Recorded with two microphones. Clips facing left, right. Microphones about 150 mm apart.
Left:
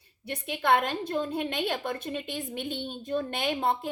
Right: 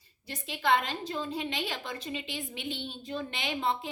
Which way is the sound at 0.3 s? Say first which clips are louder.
Left 3 dB; 55° left (ahead or behind).